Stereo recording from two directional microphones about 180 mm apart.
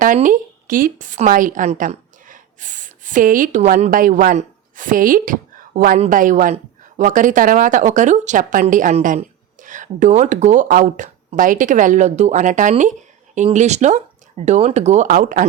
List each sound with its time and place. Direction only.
0.0 s a woman's voice: 45° right (ahead or behind)